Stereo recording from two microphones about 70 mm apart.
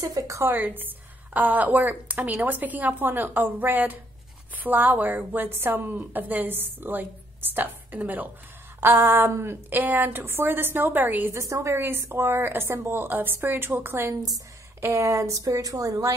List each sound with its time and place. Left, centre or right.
0.0 s a woman's voice: right
0.5 s a woman's voice: right
11.3 s speech: right
11.7 s a woman's voice: right
14.8 s speech: right